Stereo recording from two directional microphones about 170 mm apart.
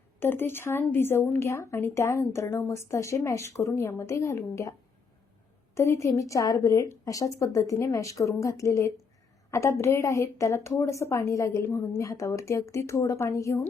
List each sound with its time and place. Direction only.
0.2 s speech: 15° left (ahead or behind)
5.7 s a woman's voice: 15° left (ahead or behind)